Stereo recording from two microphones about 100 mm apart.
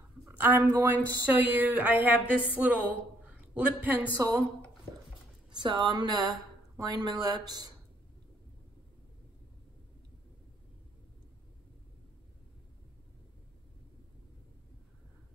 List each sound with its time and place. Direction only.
0.3 s a man's voice: 20° right (ahead or behind)
4.2 s speech: 35° right (ahead or behind)
5.5 s speech: 50° right (ahead or behind)